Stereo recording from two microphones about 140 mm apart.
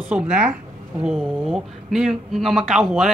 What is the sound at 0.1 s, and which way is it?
A woman's voice, 5° right (ahead or behind).